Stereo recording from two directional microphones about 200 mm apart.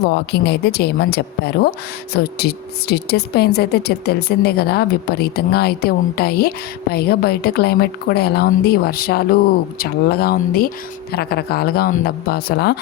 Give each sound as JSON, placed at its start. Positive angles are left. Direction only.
{"t": 0.0, "sound": "speech", "side_deg": 55}